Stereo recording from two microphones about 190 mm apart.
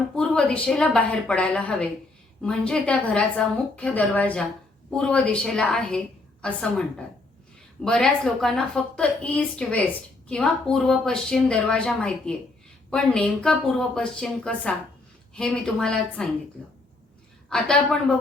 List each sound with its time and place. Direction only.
0.2 s a woman's voice: 5° left (ahead or behind)